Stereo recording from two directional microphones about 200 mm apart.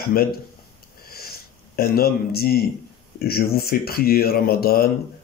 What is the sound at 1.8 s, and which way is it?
Speech, 50° left (ahead or behind).